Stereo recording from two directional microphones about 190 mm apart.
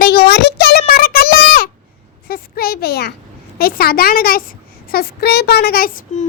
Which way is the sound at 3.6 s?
55° left (ahead or behind).